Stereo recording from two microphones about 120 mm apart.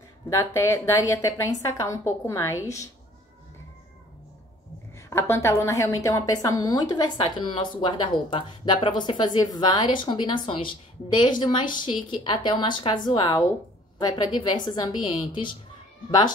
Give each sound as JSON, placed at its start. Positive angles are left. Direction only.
{"t": 0.3, "sound": "a woman's voice", "side_deg": 25}
{"t": 5.1, "sound": "a woman's voice", "side_deg": 20}